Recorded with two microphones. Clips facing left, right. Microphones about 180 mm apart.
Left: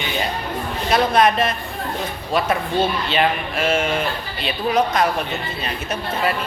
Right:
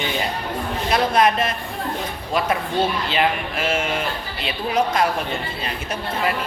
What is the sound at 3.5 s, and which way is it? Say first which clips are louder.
A man's voice: left 3 dB; 25° left (ahead or behind).